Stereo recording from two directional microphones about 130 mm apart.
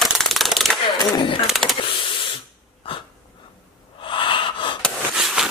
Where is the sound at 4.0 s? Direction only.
40° left (ahead or behind).